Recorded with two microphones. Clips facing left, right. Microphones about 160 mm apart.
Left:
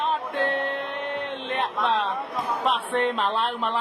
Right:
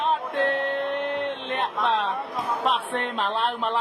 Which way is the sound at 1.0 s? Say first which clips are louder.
Right 3 dB; centre (ahead or behind).